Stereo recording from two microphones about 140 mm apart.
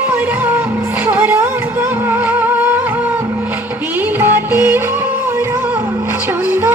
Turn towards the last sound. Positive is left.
turn(degrees=-15)  # may be behind; listen again after turning